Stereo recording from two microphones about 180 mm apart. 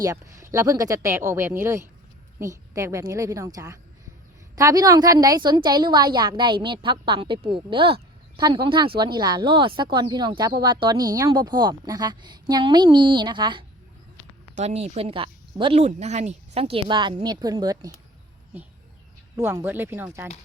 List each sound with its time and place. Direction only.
0.0 s a woman's voice: 15° right (ahead or behind)
14.5 s a woman's voice: 35° right (ahead or behind); by 17.9 s 20° right (ahead or behind)
19.4 s speech: 15° right (ahead or behind)